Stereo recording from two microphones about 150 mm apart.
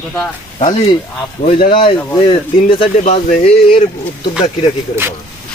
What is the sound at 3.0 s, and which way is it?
Speech, 50° left (ahead or behind).